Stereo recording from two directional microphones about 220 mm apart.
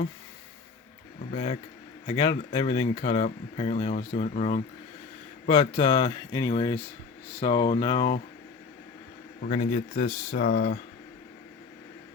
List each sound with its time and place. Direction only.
1.3 s speech: 30° left (ahead or behind)
9.5 s speech: 35° left (ahead or behind)